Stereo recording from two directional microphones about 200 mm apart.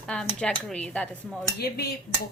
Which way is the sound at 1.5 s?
50° left (ahead or behind).